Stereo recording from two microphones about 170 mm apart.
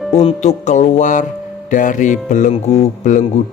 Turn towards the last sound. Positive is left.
turn(degrees=45)  # may be behind; listen again after turning